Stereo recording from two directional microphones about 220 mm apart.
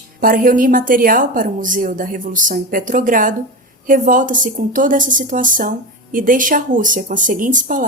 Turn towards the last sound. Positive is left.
turn(degrees=-35)  # may be behind; listen again after turning